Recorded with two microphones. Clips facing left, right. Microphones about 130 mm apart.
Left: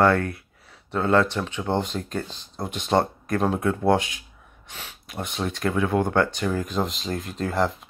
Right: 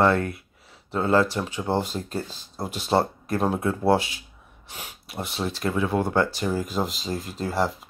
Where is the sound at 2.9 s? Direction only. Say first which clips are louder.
Left 1 dB; 20° right (ahead or behind).